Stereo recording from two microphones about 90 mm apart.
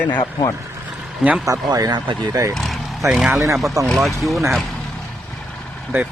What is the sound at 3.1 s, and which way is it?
Speech, 5° right (ahead or behind).